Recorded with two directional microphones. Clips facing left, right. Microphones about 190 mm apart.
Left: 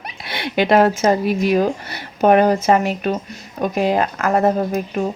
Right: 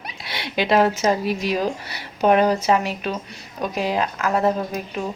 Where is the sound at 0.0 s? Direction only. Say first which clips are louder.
Left 5 dB; 55° left (ahead or behind).